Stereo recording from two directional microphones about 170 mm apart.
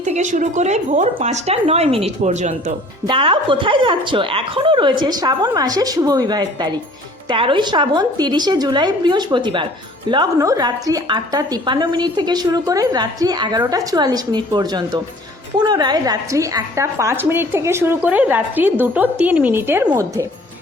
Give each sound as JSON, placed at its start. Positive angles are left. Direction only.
{"t": 0.0, "sound": "speech", "side_deg": -45}
{"t": 3.1, "sound": "a woman's voice", "side_deg": -30}